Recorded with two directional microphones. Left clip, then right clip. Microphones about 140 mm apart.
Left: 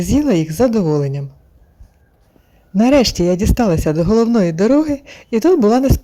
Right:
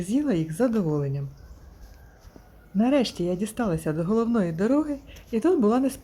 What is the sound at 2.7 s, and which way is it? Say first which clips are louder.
A man's voice: left 11 dB; 50° left (ahead or behind).